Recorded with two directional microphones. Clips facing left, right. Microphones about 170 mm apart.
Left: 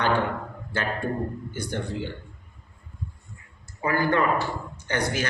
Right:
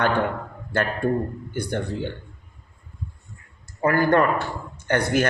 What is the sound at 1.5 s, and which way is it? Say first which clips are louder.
Speech: right 5 dB; 55° right (ahead or behind).